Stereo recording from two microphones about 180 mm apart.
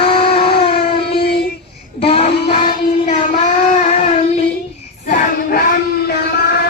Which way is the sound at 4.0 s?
35° left (ahead or behind).